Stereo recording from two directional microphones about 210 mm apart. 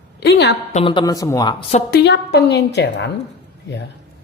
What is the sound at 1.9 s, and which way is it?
A woman's voice, 55° left (ahead or behind).